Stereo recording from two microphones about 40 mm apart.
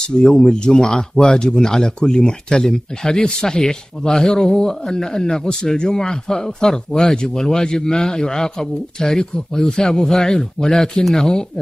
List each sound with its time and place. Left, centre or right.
0.3 s speech: centre